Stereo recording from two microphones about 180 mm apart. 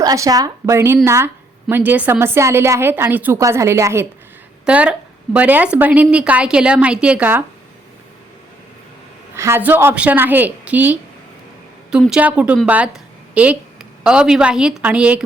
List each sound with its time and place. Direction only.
0.0 s a woman's voice: 20° right (ahead or behind)
9.3 s a woman's voice: 15° right (ahead or behind)